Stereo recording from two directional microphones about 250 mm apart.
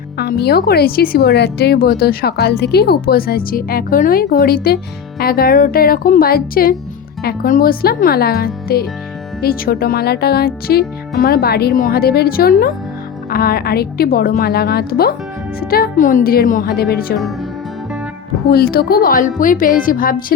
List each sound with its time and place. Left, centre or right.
0.2 s speech: left
18.5 s speech: left